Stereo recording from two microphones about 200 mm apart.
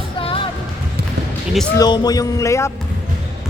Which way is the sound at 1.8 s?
20° left (ahead or behind).